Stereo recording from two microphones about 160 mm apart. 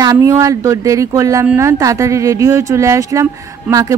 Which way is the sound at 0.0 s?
20° right (ahead or behind).